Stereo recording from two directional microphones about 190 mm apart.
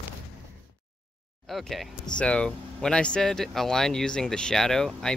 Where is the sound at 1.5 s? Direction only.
Centre (ahead or behind).